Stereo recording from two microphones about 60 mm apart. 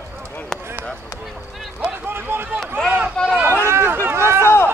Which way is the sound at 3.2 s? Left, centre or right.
Centre.